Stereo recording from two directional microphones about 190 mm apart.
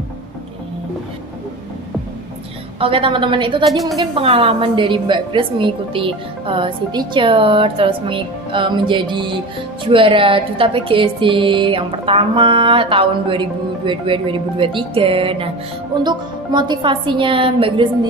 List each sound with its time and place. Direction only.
2.8 s a woman's voice: 30° right (ahead or behind)